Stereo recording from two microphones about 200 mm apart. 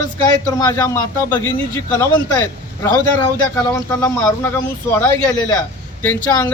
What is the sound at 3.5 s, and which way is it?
Speech, 15° left (ahead or behind).